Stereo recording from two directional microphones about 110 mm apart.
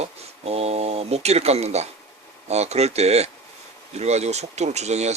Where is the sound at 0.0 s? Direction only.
70° right (ahead or behind).